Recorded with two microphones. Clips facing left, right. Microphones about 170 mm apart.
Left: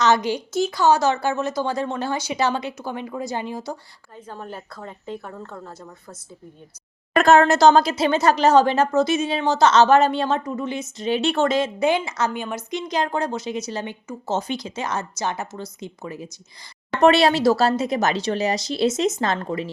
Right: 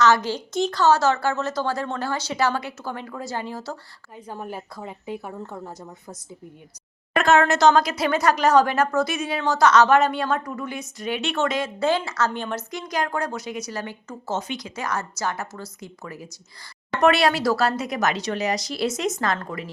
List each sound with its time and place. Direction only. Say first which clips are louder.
0.0 s a woman's voice: even; 15° left (ahead or behind)
4.3 s a woman's voice: right 2 dB; 10° right (ahead or behind)
7.2 s speech: left 3 dB; 35° left (ahead or behind)
11.8 s speech: left 2 dB; 15° left (ahead or behind)
12.7 s speech: left 4 dB; 25° left (ahead or behind)